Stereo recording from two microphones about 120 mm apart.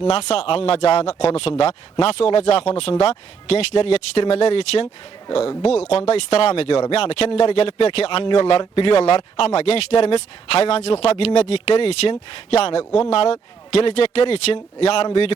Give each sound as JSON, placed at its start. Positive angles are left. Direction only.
{"t": 0.0, "sound": "speech", "side_deg": 60}